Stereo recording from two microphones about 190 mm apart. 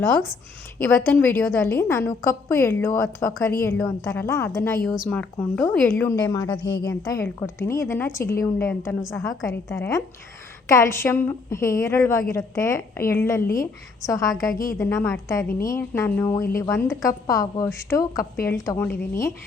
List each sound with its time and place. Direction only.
0.8 s a woman's voice: 10° left (ahead or behind)